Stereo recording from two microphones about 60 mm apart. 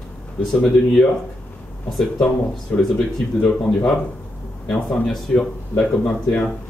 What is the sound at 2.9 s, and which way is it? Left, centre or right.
Speech, centre.